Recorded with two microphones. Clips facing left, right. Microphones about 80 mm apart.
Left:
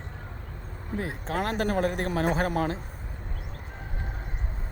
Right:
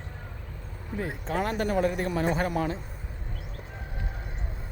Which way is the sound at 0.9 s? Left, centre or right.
Left.